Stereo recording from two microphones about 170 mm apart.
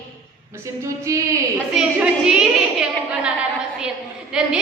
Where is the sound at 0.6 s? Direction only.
20° right (ahead or behind).